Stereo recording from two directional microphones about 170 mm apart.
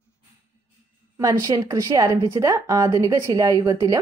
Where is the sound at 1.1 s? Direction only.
15° right (ahead or behind).